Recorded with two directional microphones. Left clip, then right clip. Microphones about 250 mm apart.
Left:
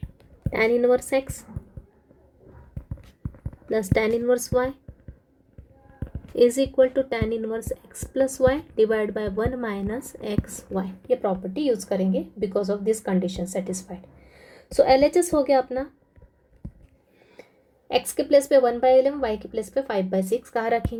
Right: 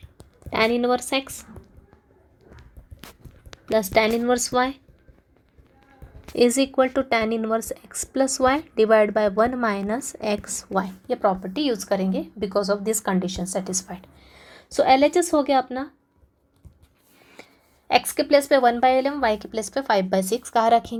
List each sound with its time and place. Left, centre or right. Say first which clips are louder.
0.5 s speech: left 1 dB; centre
3.7 s speech: right 3 dB; centre
6.3 s speech: even; centre
13.5 s a woman's voice: right 1 dB; right
13.9 s a woman's voice: right 2 dB; centre
18.0 s speech: even; centre